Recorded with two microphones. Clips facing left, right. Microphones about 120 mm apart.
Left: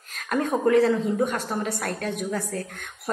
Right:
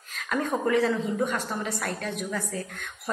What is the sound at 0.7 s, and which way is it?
Speech, 45° left (ahead or behind).